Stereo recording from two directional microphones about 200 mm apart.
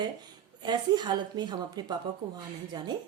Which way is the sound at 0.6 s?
20° right (ahead or behind).